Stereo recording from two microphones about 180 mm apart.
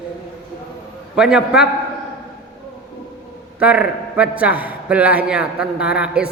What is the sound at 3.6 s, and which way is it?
A man's voice, 5° right (ahead or behind).